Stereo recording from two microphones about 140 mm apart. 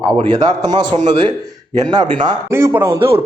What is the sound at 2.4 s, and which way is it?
Speech, 20° right (ahead or behind).